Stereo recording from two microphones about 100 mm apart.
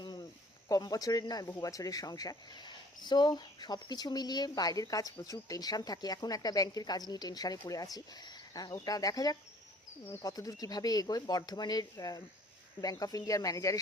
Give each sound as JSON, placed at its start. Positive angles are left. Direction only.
{"t": 0.0, "sound": "snake", "side_deg": 45}
{"t": 0.7, "sound": "speech", "side_deg": 40}
{"t": 10.1, "sound": "speech", "side_deg": 30}
{"t": 10.3, "sound": "speech", "side_deg": 40}